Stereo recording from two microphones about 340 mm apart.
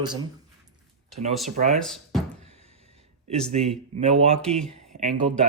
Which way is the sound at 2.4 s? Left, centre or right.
Centre.